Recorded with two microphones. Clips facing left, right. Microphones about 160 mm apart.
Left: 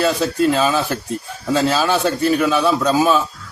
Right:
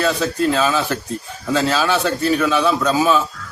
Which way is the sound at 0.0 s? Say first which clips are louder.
Left 2 dB; 10° left (ahead or behind).